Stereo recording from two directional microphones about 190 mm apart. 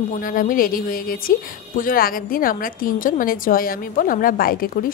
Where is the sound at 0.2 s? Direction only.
45° left (ahead or behind).